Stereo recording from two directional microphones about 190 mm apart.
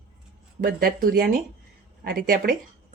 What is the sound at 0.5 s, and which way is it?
Speech, 50° right (ahead or behind).